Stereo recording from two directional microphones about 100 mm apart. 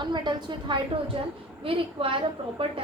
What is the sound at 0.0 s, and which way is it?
A woman's voice, 50° right (ahead or behind).